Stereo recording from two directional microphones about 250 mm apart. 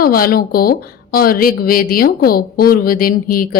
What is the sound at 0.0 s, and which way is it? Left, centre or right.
A woman's voice, left.